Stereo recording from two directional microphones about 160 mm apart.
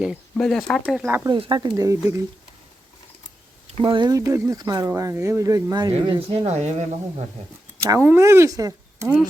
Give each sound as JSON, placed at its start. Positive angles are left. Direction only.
{"t": 0.0, "sound": "speech", "side_deg": 0}
{"t": 1.3, "sound": "speech", "side_deg": -30}
{"t": 3.7, "sound": "speech", "side_deg": -35}
{"t": 5.9, "sound": "speech", "side_deg": -35}
{"t": 7.9, "sound": "speech", "side_deg": -15}